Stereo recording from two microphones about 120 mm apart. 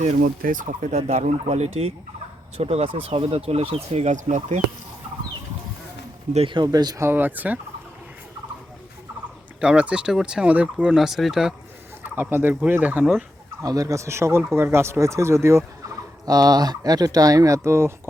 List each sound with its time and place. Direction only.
0.0 s speech: 85° right
6.3 s speech: 45° right (ahead or behind)
6.7 s speech: 35° right (ahead or behind)
7.0 s speech: 15° right (ahead or behind)
9.6 s speech: 10° right (ahead or behind)
12.0 s speech: 15° right (ahead or behind)
13.6 s speech: 30° right (ahead or behind)
16.2 s speech: 30° right (ahead or behind)